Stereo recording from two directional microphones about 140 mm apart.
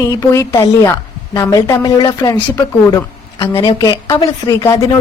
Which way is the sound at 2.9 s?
25° left (ahead or behind).